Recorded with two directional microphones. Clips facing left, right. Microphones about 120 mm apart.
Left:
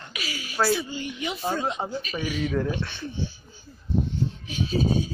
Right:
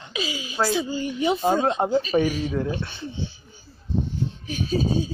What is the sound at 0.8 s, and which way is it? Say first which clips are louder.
Speech: right 8 dB; 35° right (ahead or behind).